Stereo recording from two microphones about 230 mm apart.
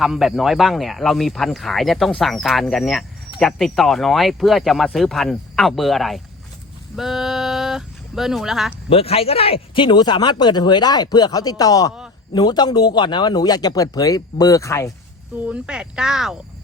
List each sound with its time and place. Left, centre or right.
0.0 s speech: centre
8.9 s a man's voice: left
15.4 s speech: centre